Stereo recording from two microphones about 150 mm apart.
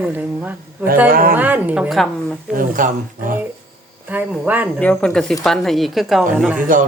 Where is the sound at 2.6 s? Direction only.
65° right (ahead or behind).